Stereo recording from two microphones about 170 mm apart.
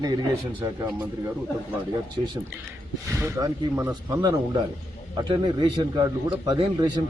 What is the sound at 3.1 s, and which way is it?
A man's voice, 15° right (ahead or behind).